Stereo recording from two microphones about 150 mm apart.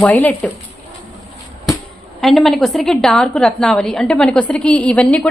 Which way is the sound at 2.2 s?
Centre (ahead or behind).